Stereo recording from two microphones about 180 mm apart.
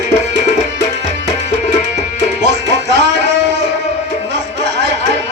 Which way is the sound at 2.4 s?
75° right (ahead or behind).